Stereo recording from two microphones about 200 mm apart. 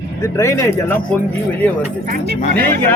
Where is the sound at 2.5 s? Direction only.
10° left (ahead or behind).